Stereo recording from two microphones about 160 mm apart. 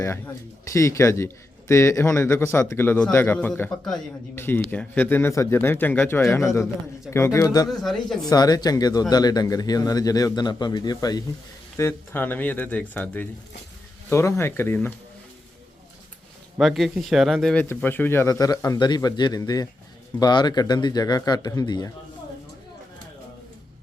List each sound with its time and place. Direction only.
0.6 s a man's voice: 20° left (ahead or behind)
7.7 s speech: centre (ahead or behind)
8.3 s speech: 25° left (ahead or behind)
11.8 s a man's voice: 15° left (ahead or behind)
16.6 s a man's voice: centre (ahead or behind); by 21.9 s 25° left (ahead or behind)